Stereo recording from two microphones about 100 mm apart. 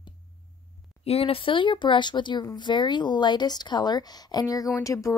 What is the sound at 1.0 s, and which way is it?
A woman's voice, 75° left (ahead or behind).